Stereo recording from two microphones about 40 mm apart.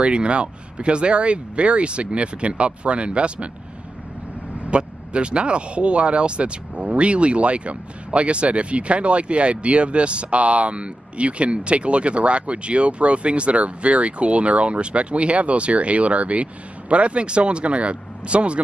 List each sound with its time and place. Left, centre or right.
0.0 s speech: right
4.6 s speech: right